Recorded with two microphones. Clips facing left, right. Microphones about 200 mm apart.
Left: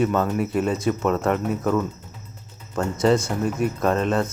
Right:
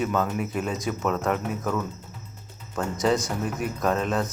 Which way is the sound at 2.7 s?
Centre (ahead or behind).